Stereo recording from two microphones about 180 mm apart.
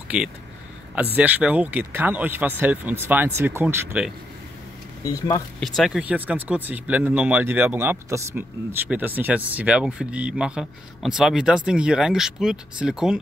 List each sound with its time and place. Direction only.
0.1 s speech: 5° right (ahead or behind)
5.0 s speech: 20° left (ahead or behind)
5.6 s speech: centre (ahead or behind)